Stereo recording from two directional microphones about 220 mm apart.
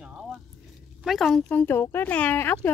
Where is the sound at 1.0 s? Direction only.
Centre (ahead or behind).